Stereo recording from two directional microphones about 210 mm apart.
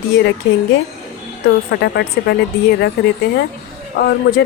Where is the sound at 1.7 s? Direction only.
55° left (ahead or behind).